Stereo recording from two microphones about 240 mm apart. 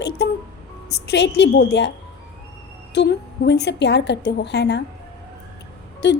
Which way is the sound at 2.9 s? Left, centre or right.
Left.